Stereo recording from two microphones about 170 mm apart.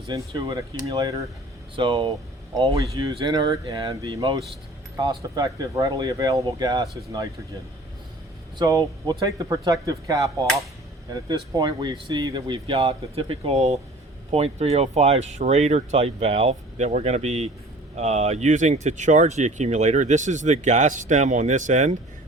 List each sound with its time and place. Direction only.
0.1 s speech: 25° right (ahead or behind)
8.5 s speech: 20° right (ahead or behind); by 21.9 s 45° right (ahead or behind)